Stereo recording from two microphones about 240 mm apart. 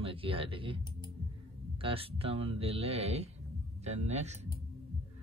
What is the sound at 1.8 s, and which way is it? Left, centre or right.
Speech, right.